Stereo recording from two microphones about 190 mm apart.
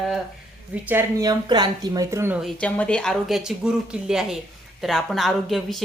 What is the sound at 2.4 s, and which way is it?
A woman's voice, 5° left (ahead or behind).